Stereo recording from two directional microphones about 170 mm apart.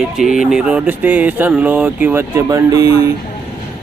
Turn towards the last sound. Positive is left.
turn(degrees=-20)  # may be behind; listen again after turning